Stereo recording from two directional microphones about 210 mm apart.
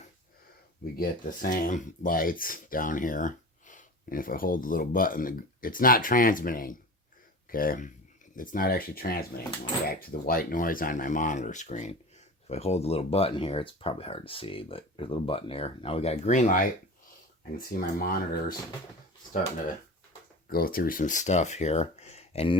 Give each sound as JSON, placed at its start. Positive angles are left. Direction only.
{"t": 0.9, "sound": "speech", "side_deg": 45}
{"t": 20.5, "sound": "speech", "side_deg": 45}